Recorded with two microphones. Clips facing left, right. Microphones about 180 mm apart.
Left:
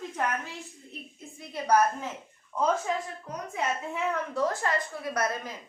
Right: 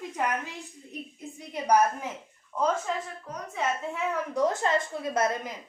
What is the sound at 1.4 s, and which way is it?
Speech, 15° right (ahead or behind).